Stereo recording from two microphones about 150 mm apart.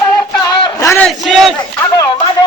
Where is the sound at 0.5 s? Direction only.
30° left (ahead or behind).